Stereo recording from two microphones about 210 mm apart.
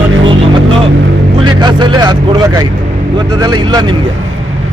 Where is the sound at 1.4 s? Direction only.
20° right (ahead or behind).